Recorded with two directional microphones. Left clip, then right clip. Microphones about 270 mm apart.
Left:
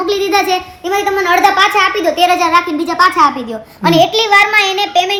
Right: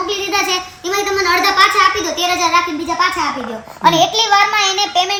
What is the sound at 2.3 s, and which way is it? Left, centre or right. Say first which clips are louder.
Speech: even; centre.